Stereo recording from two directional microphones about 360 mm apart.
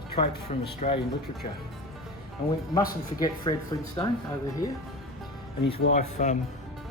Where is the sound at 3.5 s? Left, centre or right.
Centre.